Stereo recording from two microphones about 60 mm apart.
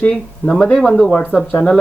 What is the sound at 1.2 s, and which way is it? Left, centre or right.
Speech, left.